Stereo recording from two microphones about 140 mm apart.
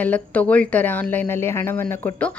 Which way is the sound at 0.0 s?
10° left (ahead or behind).